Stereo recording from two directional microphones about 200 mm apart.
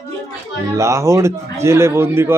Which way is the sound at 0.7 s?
15° right (ahead or behind).